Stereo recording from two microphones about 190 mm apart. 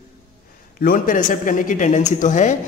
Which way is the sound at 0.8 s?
50° left (ahead or behind).